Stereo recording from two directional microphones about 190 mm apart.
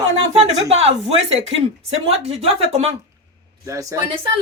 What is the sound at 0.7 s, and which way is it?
Speech, 35° right (ahead or behind).